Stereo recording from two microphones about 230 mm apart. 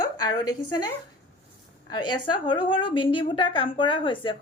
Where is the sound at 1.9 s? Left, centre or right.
Centre.